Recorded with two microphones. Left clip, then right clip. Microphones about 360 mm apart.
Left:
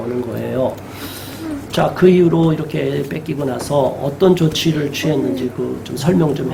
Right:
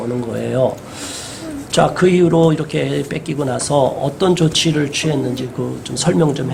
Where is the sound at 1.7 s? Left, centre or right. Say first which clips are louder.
Even; right.